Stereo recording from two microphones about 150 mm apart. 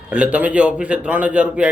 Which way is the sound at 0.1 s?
10° right (ahead or behind).